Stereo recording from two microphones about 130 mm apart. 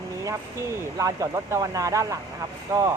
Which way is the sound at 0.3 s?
25° right (ahead or behind).